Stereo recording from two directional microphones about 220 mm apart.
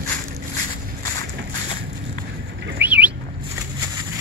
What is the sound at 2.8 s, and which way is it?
Bird, 5° right (ahead or behind).